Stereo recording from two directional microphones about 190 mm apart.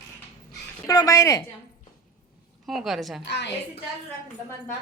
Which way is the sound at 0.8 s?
20° left (ahead or behind).